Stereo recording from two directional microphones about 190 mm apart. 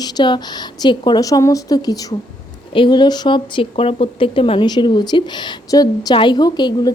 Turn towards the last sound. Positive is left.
turn(degrees=20)  # may be behind; listen again after turning